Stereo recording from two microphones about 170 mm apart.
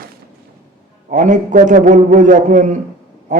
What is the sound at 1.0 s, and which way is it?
Speech, 50° right (ahead or behind).